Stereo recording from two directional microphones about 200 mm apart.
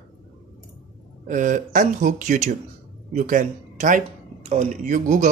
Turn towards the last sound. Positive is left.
turn(degrees=-40)  # may be behind; listen again after turning